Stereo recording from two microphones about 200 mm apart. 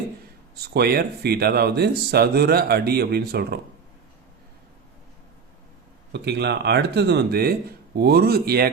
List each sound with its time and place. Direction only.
0.5 s speech: 55° right (ahead or behind)
6.1 s speech: 55° right (ahead or behind)